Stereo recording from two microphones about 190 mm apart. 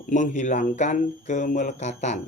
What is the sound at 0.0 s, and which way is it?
Speech, 40° left (ahead or behind).